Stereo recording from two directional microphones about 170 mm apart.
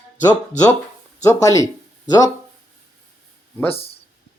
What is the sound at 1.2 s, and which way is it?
Speech, 20° left (ahead or behind).